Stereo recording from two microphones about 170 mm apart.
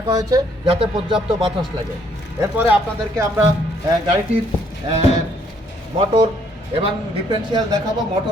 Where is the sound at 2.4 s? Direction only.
15° right (ahead or behind).